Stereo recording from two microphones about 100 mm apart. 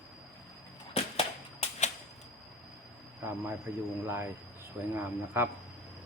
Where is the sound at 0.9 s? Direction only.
85° left.